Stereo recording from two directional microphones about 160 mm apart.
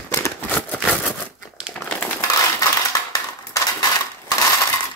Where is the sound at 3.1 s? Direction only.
25° left (ahead or behind).